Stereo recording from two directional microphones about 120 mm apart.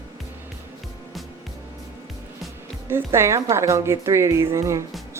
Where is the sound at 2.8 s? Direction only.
20° right (ahead or behind).